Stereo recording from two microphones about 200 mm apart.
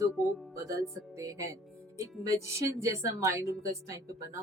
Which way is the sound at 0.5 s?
15° right (ahead or behind).